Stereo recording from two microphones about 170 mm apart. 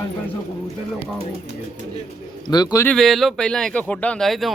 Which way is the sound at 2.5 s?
25° left (ahead or behind).